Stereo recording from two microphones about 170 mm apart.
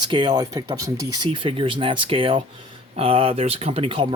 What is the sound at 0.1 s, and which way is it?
Speech, 30° right (ahead or behind).